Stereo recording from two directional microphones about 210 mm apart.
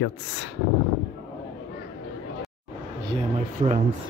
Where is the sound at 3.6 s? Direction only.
25° right (ahead or behind).